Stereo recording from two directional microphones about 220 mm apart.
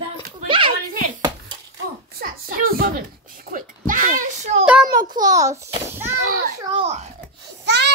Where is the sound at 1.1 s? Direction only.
20° right (ahead or behind).